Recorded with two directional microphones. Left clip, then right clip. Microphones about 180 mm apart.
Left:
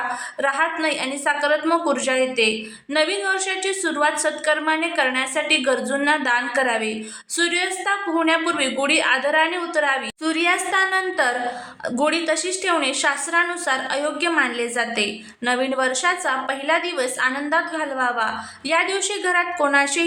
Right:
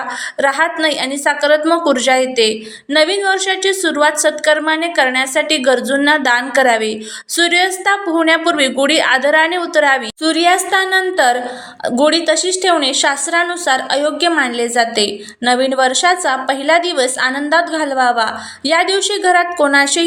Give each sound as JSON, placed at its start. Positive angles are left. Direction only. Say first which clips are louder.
{"t": 0.3, "sound": "a woman's voice", "louder": "right 7 dB", "side_deg": -25}